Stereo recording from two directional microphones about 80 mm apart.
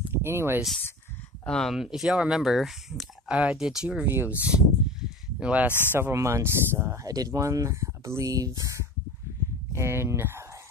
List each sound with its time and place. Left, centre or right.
0.1 s speech: right
1.4 s speech: centre
1.8 s speech: centre
4.0 s speech: right
5.7 s speech: left
6.1 s speech: right
7.1 s speech: right